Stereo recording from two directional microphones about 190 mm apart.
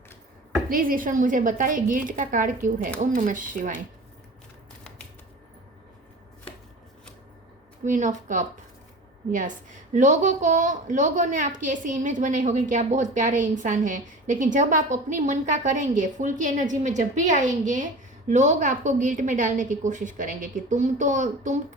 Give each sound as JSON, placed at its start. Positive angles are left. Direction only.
{"t": 0.7, "sound": "a woman's voice", "side_deg": -50}
{"t": 7.9, "sound": "a woman's voice", "side_deg": -40}
{"t": 9.9, "sound": "a woman's voice", "side_deg": -40}